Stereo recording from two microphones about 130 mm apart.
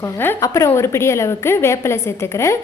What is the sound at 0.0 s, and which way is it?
A woman's voice, 20° left (ahead or behind).